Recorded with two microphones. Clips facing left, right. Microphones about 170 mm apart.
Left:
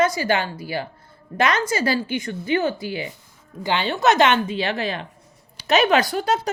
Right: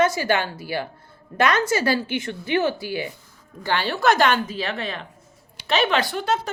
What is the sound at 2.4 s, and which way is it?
Speech, centre (ahead or behind).